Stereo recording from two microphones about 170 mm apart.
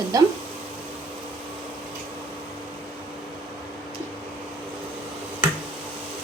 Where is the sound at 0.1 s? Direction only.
20° right (ahead or behind).